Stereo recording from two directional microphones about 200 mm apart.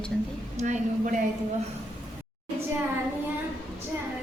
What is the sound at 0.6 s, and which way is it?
Speech, 35° right (ahead or behind).